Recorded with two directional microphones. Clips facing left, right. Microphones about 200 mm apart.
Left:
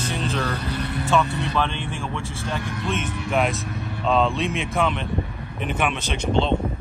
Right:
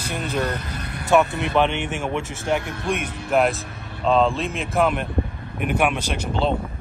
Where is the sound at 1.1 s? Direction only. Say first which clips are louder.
Right 5 dB; 20° right (ahead or behind).